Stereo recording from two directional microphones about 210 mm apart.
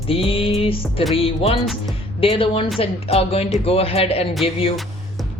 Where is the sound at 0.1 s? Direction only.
25° left (ahead or behind).